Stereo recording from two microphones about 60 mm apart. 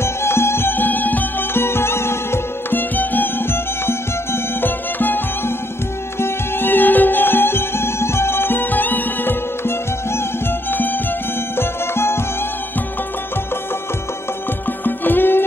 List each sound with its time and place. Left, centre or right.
0.0 s music: left
1.6 s music: left
11.5 s music: left
14.9 s music: left